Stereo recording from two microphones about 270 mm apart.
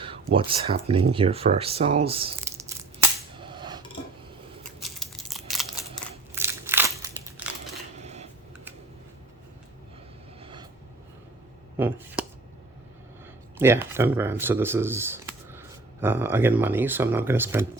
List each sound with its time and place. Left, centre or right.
0.0 s speech: centre
2.0 s a sound: right
3.3 s music: centre
4.8 s crumpling: centre
6.3 s crushing: centre
7.9 s a sound: right
10.4 s vehicle: centre
11.8 s speech: centre
13.6 s speech: centre